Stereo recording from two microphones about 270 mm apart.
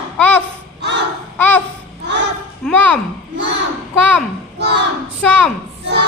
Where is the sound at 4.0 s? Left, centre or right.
Centre.